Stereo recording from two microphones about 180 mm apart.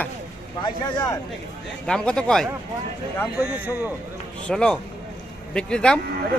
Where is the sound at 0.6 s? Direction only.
20° left (ahead or behind).